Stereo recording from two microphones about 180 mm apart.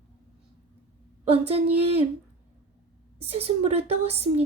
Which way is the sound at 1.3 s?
35° right (ahead or behind).